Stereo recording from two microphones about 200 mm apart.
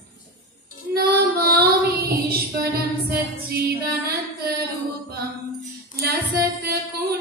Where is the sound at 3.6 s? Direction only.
50° right (ahead or behind).